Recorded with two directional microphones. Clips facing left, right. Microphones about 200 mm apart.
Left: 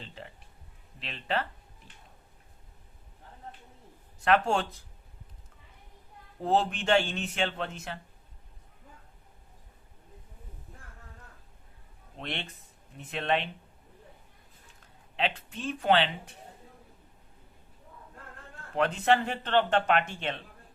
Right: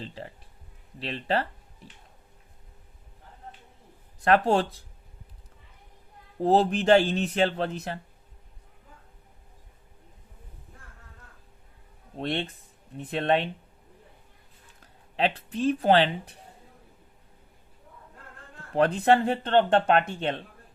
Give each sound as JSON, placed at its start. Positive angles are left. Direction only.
{"t": 0.0, "sound": "speech", "side_deg": -35}
{"t": 4.2, "sound": "speech", "side_deg": -35}
{"t": 6.4, "sound": "speech", "side_deg": -35}
{"t": 12.1, "sound": "speech", "side_deg": -35}
{"t": 14.8, "sound": "speech", "side_deg": -40}
{"t": 18.8, "sound": "speech", "side_deg": -35}